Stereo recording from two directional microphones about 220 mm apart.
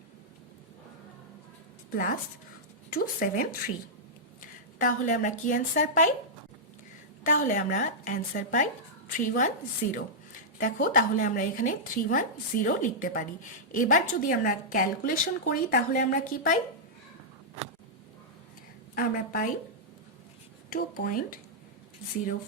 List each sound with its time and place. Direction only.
1.9 s a woman's voice: 40° left (ahead or behind)
7.3 s a woman's voice: 35° left (ahead or behind)
18.9 s a woman's voice: 40° left (ahead or behind)
20.7 s a woman's voice: 40° left (ahead or behind)